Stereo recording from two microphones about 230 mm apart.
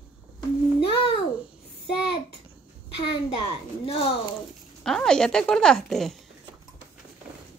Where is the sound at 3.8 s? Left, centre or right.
Left.